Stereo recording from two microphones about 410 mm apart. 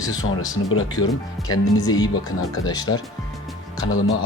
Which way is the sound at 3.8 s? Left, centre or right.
Left.